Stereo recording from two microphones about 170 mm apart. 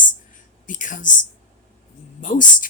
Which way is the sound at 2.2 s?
50° left (ahead or behind).